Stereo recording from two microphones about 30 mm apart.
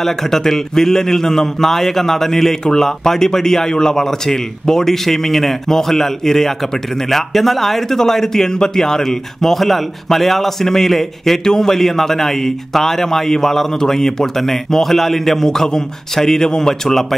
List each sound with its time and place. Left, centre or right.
0.0 s a man's voice: centre